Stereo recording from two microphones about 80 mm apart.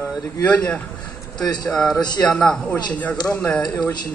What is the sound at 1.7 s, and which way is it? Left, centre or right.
A man's voice, centre.